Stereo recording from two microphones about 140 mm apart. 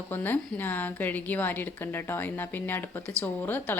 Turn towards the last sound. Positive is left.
turn(degrees=15)  # may be behind; listen again after turning